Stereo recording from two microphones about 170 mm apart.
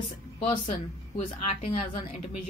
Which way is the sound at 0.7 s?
35° left (ahead or behind).